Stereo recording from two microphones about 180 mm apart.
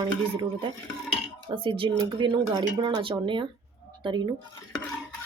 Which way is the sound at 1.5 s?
30° right (ahead or behind).